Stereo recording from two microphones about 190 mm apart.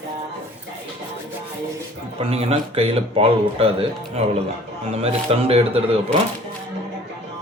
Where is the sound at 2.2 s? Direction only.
30° right (ahead or behind).